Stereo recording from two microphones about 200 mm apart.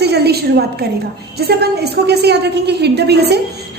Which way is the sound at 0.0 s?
55° right (ahead or behind).